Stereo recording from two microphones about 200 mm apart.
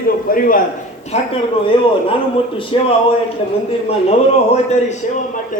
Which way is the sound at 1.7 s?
25° left (ahead or behind).